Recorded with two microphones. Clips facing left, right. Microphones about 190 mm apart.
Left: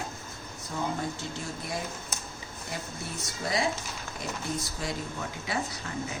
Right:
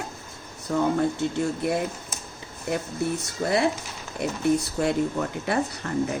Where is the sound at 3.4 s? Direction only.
65° right (ahead or behind).